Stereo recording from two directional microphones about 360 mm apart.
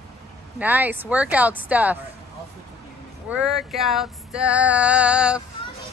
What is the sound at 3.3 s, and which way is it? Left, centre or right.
Female singing, centre.